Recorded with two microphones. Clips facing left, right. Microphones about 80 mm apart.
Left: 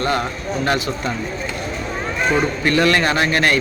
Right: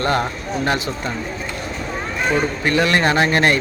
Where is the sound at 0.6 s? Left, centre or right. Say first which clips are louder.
Left 1 dB; right.